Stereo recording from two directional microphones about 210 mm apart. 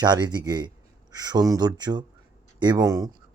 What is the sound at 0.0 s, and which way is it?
Speech, 20° right (ahead or behind).